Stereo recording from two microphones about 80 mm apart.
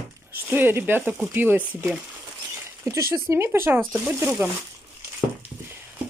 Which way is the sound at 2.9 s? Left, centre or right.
Right.